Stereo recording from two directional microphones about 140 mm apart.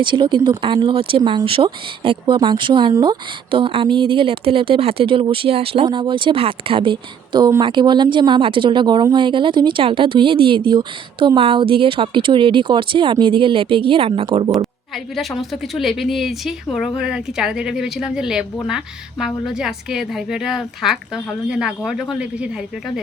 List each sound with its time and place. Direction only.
0.0 s a woman's voice: 35° right (ahead or behind)
14.9 s a woman's voice: centre (ahead or behind)